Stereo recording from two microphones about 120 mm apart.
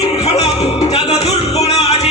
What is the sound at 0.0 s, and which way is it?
Music, 60° left (ahead or behind).